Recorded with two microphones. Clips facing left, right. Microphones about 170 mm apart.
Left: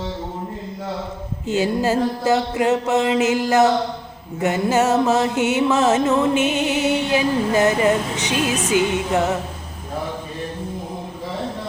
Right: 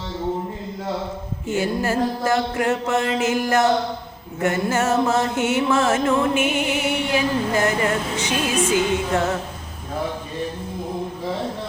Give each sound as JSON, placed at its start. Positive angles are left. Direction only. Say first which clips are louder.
{"t": 1.5, "sound": "music", "louder": "left 3 dB", "side_deg": 20}
{"t": 4.4, "sound": "music", "louder": "left 3 dB", "side_deg": 20}